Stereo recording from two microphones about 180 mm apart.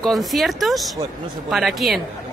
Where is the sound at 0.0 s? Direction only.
Centre (ahead or behind).